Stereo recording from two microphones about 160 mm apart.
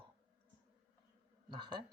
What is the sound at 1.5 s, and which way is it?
Speech, 30° right (ahead or behind).